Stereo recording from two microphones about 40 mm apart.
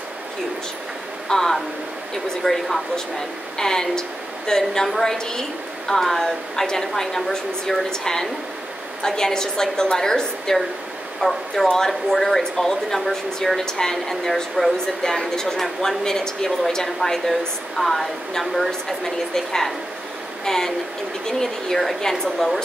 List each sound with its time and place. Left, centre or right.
1.3 s a woman's voice: centre
11.1 s a woman's voice: centre